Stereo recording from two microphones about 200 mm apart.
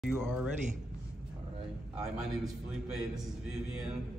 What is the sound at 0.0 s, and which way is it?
Speech, 5° right (ahead or behind).